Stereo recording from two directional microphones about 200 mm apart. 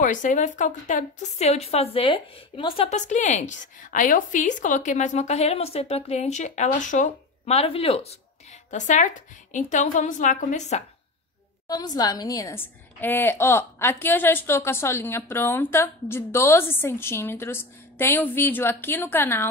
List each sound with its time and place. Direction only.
0.0 s a woman's voice: 40° left (ahead or behind)
11.6 s a woman's voice: 20° left (ahead or behind)